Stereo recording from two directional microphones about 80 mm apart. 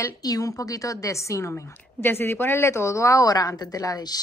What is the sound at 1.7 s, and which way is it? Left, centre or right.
A woman's voice, left.